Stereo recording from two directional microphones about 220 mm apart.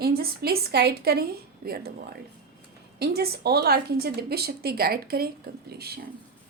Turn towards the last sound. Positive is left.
turn(degrees=-45)  # may be behind; listen again after turning